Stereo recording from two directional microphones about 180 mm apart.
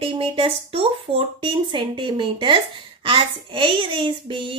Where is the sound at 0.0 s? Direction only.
30° right (ahead or behind).